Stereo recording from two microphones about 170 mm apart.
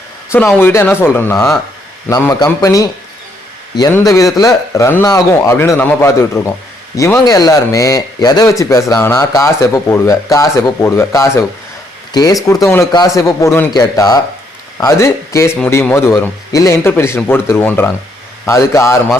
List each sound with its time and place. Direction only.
0.3 s a man's voice: 10° left (ahead or behind)
3.9 s a man's voice: 20° left (ahead or behind)